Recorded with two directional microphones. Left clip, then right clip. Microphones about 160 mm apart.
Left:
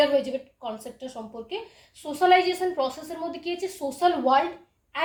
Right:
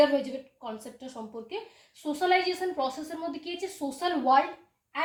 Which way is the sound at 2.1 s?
30° left (ahead or behind).